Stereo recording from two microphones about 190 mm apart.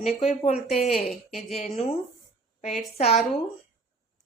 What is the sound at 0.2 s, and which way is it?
A woman's voice, 35° left (ahead or behind).